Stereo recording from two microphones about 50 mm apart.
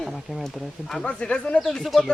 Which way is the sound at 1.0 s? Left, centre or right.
Left.